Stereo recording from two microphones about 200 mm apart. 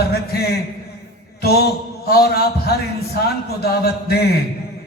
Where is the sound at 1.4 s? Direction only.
50° left (ahead or behind).